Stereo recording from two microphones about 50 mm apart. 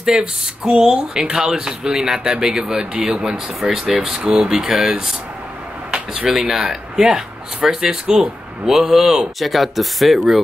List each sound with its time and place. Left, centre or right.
0.0 s speech: centre
6.7 s speech: centre